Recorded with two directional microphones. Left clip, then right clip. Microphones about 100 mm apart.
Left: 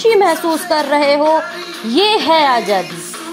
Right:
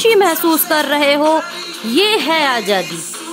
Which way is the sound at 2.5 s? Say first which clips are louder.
Left 2 dB; 75° right (ahead or behind).